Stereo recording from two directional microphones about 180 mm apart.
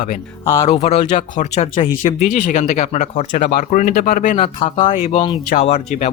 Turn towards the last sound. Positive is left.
turn(degrees=40)  # may be behind; listen again after turning